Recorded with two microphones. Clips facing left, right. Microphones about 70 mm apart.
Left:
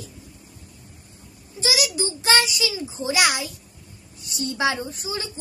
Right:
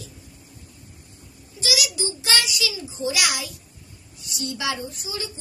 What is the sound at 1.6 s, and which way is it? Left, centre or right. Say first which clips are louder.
A woman's voice: left 2 dB; left.